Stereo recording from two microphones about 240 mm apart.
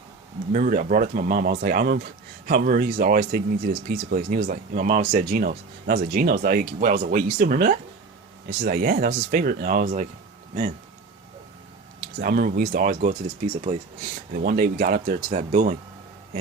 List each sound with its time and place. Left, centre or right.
0.5 s speech: right
11.9 s speech: right
14.3 s speech: right